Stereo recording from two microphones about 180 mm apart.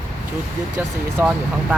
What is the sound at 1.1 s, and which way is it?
Speech, 5° right (ahead or behind).